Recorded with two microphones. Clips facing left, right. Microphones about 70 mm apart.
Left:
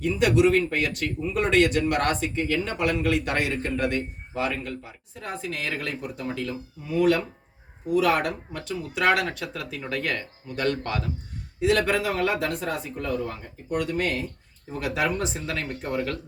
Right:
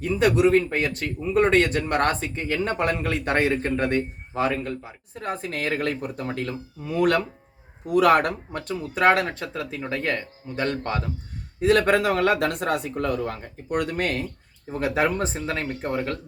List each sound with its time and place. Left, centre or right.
0.0 s speech: right
9.0 s speech: right
11.6 s speech: right
14.7 s speech: right